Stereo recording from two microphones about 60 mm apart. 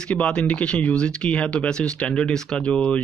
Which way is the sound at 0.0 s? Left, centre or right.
Centre.